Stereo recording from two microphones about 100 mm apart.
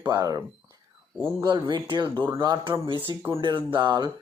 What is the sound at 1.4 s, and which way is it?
Speech, 50° right (ahead or behind).